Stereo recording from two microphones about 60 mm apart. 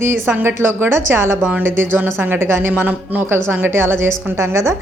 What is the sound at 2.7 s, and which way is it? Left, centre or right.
Speech, right.